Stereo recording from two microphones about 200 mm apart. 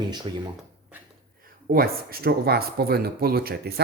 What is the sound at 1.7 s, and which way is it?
Speech, 50° right (ahead or behind).